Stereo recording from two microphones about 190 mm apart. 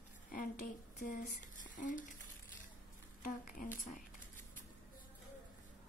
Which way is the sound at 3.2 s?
45° left (ahead or behind).